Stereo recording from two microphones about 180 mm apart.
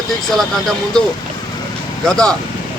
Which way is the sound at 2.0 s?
5° left (ahead or behind).